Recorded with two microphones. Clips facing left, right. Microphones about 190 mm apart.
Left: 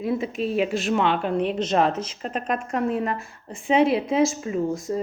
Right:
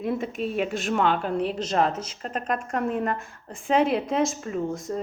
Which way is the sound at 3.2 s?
5° left (ahead or behind).